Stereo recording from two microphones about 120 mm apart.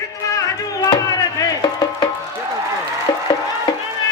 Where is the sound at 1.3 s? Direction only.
35° left (ahead or behind).